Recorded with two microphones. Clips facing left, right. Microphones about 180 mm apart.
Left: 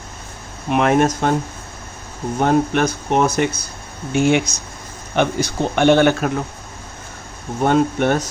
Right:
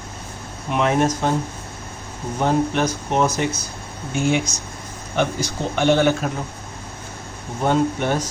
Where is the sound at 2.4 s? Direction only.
55° left (ahead or behind).